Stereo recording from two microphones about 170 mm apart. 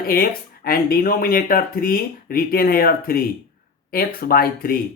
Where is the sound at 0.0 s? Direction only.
60° left (ahead or behind).